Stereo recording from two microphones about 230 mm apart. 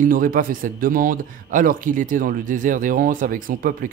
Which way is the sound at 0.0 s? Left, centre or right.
Right.